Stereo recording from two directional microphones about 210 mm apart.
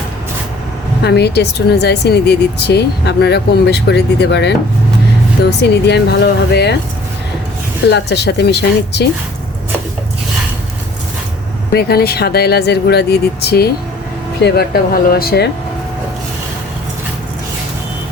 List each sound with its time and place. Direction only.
1.0 s speech: 50° left (ahead or behind)
7.9 s speech: 55° left (ahead or behind)
11.7 s speech: 50° left (ahead or behind)